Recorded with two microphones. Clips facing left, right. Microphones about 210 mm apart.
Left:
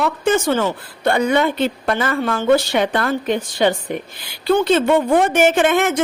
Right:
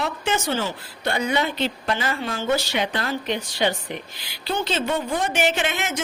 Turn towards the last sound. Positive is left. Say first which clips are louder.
# left 10 dB
turn(degrees=55)  # may be behind; listen again after turning